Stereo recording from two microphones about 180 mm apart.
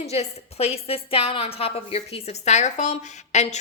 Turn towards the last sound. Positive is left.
turn(degrees=40)  # may be behind; listen again after turning